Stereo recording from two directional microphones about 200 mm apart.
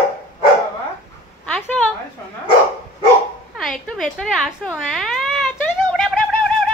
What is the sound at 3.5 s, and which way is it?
A woman's voice, centre (ahead or behind).